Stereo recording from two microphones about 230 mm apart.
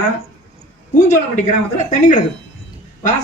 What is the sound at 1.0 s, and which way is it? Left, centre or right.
A man's voice, left.